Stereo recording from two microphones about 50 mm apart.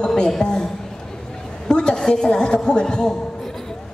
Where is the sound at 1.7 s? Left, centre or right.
Centre.